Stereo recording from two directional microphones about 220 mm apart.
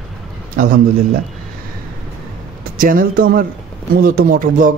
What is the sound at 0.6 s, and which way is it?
Speech, 40° right (ahead or behind).